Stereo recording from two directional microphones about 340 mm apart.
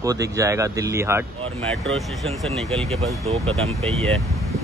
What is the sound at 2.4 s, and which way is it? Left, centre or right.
Speech, centre.